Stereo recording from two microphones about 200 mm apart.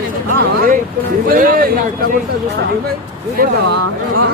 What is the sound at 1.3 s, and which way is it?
Speech, 45° right (ahead or behind).